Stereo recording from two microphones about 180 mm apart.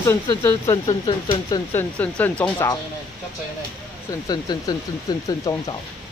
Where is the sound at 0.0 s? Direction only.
15° left (ahead or behind).